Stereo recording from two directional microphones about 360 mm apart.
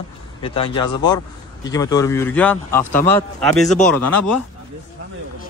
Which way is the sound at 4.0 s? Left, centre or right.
Left.